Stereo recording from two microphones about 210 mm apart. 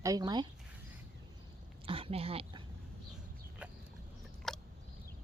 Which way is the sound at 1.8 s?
25° right (ahead or behind).